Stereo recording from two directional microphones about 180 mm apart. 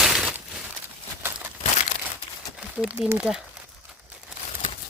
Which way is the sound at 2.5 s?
5° right (ahead or behind).